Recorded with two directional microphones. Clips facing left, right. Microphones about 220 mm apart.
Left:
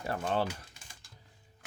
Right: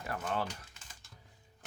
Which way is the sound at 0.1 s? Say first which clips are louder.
Left 4 dB; 30° left (ahead or behind).